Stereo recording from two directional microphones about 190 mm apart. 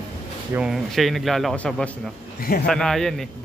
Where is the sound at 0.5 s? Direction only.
5° right (ahead or behind).